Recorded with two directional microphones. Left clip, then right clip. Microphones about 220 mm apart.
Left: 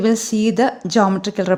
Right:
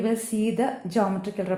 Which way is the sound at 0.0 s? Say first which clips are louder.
Left 8 dB; 50° left (ahead or behind).